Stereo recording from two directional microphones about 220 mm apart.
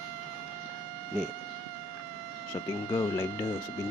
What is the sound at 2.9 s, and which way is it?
Speech, 15° left (ahead or behind).